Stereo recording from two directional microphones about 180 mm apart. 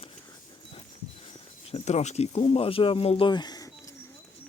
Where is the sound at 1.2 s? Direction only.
35° left (ahead or behind); by 4.0 s 20° left (ahead or behind).